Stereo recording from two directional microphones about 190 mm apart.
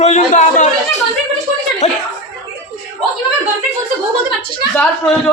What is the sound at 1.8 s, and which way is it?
Speech, 35° left (ahead or behind).